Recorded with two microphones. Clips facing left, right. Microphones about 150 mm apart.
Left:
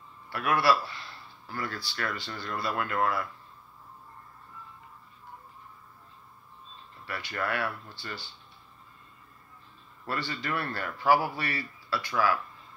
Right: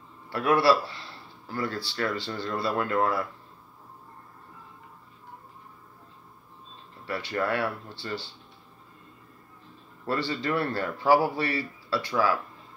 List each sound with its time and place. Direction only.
0.3 s a man's voice: 30° right (ahead or behind)
7.1 s a man's voice: 30° right (ahead or behind)
10.0 s a man's voice: 30° right (ahead or behind)